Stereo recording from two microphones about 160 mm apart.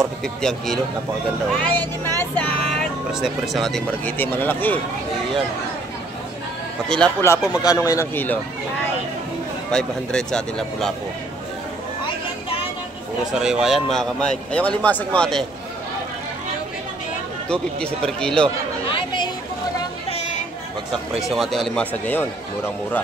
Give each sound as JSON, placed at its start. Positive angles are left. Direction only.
{"t": 0.2, "sound": "speech", "side_deg": 5}
{"t": 6.9, "sound": "speech", "side_deg": 5}
{"t": 7.2, "sound": "speech", "side_deg": 25}
{"t": 9.7, "sound": "speech", "side_deg": 5}
{"t": 13.3, "sound": "speech", "side_deg": -5}
{"t": 17.5, "sound": "speech", "side_deg": 5}
{"t": 18.9, "sound": "chatter", "side_deg": 30}
{"t": 21.2, "sound": "speech", "side_deg": 0}